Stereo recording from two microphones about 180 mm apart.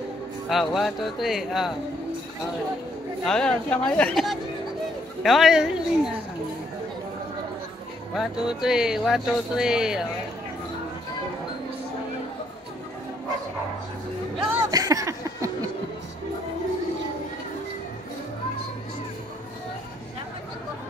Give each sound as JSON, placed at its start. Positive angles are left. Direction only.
{"t": 0.5, "sound": "speech", "side_deg": 0}
{"t": 3.3, "sound": "speech", "side_deg": 5}
{"t": 8.1, "sound": "speech", "side_deg": 0}
{"t": 14.6, "sound": "a sound", "side_deg": -20}